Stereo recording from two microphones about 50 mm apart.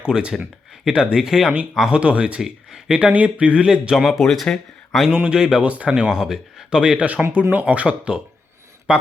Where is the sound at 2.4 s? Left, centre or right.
Centre.